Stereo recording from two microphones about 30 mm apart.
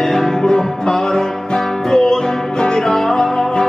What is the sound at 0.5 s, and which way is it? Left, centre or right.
Music, left.